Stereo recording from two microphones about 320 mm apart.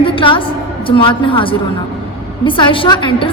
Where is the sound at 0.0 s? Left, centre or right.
Centre.